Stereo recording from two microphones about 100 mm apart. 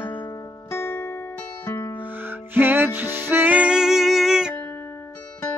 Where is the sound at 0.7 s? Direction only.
25° left (ahead or behind).